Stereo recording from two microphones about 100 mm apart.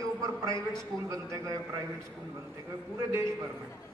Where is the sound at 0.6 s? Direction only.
30° right (ahead or behind).